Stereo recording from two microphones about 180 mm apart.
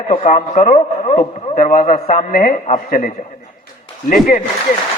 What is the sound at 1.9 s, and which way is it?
A man's voice, 45° left (ahead or behind).